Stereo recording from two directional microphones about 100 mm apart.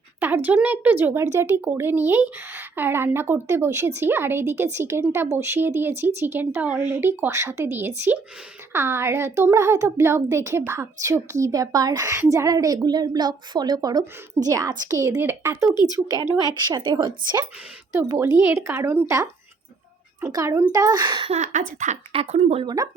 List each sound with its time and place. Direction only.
0.2 s a woman's voice: 20° right (ahead or behind)
15.2 s speech: 20° right (ahead or behind)
16.4 s speech: 45° right (ahead or behind)
18.2 s speech: 25° right (ahead or behind)
20.3 s a woman's voice: 35° right (ahead or behind)
22.1 s speech: 90° right
22.6 s a woman's voice: 35° right (ahead or behind)